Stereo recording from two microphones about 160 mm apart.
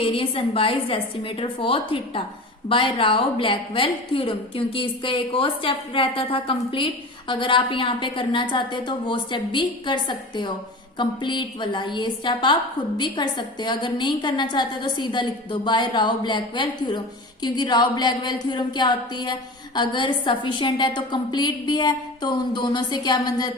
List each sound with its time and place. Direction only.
0.0 s a woman's voice: 35° left (ahead or behind)